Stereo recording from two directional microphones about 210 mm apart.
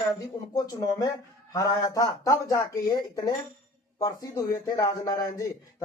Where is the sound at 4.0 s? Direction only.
15° left (ahead or behind).